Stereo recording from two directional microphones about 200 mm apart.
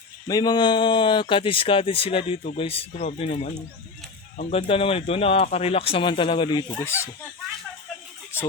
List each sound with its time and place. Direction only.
0.3 s speech: 20° left (ahead or behind)
8.3 s speech: 10° left (ahead or behind)